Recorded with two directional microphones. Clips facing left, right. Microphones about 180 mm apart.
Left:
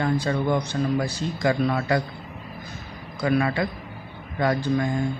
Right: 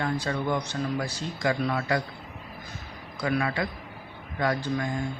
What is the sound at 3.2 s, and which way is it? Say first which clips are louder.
A man's voice: left 5 dB; 35° left (ahead or behind).